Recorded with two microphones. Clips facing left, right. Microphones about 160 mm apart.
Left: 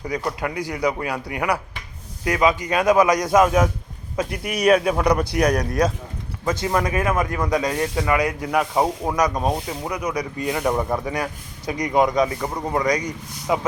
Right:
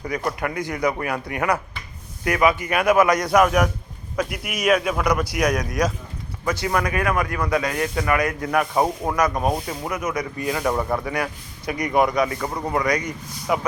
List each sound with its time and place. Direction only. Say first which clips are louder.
0.1 s speech: even; 15° left (ahead or behind)
9.3 s speech: even; 10° right (ahead or behind)
9.9 s speech: even; 15° left (ahead or behind)